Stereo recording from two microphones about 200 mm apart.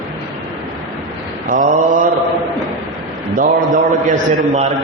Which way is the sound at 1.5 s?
40° right (ahead or behind).